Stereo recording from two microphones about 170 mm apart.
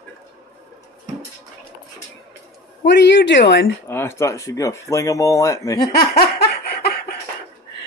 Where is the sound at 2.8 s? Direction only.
90° left.